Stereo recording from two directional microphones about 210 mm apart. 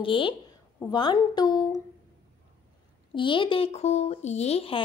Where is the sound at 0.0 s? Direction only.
25° left (ahead or behind).